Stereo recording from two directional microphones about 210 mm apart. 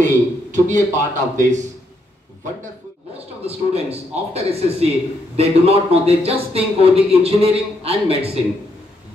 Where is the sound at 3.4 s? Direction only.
30° right (ahead or behind).